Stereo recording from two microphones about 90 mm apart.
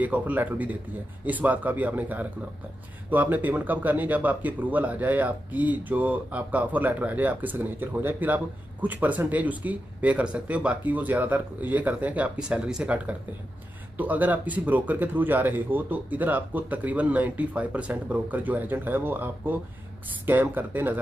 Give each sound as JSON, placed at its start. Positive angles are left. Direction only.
{"t": 0.0, "sound": "speech", "side_deg": -15}